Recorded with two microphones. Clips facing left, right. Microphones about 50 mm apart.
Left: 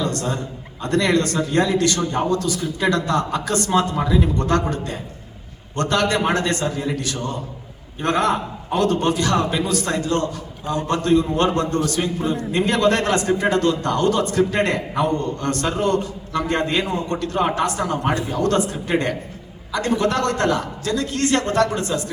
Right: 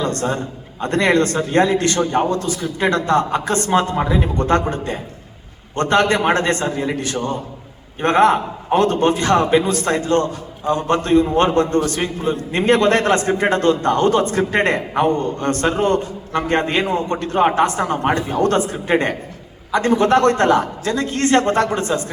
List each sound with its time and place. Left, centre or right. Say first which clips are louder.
0.0 s a man's voice: right 3 dB; right